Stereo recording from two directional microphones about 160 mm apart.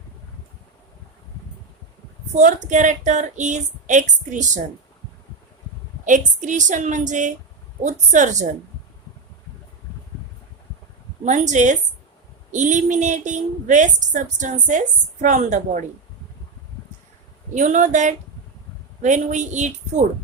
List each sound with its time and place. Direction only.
2.3 s a woman's voice: 50° right (ahead or behind)
6.1 s a woman's voice: 50° right (ahead or behind)
11.3 s a woman's voice: 50° right (ahead or behind)
17.5 s a woman's voice: 50° right (ahead or behind)